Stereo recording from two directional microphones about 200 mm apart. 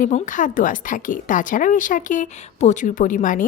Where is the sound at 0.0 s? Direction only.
40° left (ahead or behind).